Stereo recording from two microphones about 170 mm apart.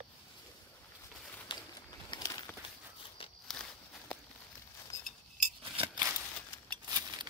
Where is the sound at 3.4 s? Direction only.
5° left (ahead or behind).